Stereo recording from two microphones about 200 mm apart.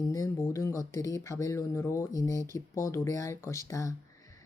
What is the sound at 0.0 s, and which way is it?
Speech, 15° left (ahead or behind).